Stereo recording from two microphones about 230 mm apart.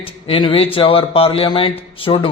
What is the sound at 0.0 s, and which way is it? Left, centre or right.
Speech, left.